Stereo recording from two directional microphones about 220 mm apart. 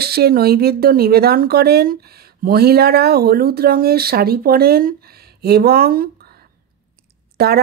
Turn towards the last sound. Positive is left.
turn(degrees=-45)  # may be behind; listen again after turning